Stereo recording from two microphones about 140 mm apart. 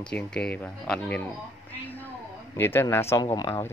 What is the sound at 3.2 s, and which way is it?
Speech, 30° left (ahead or behind).